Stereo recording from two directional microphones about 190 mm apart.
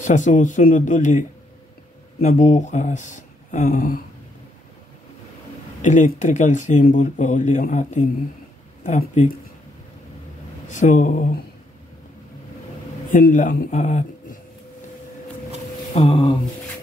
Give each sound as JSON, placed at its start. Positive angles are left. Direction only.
{"t": 0.0, "sound": "speech", "side_deg": 40}
{"t": 2.2, "sound": "speech", "side_deg": 40}
{"t": 5.8, "sound": "speech", "side_deg": 40}
{"t": 10.7, "sound": "speech", "side_deg": 40}
{"t": 13.1, "sound": "speech", "side_deg": 40}
{"t": 15.9, "sound": "a sound", "side_deg": 30}